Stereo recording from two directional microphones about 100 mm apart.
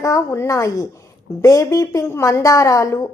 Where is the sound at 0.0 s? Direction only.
30° left (ahead or behind).